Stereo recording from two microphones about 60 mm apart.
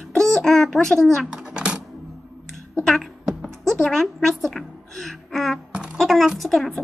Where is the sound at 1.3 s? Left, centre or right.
Centre.